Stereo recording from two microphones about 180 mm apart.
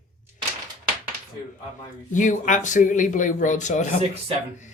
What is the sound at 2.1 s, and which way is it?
Speech, 45° left (ahead or behind).